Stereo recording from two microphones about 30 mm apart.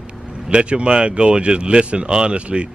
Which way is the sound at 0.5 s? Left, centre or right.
Right.